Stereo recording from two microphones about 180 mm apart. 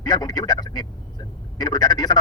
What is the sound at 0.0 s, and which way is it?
Vehicle, 20° left (ahead or behind).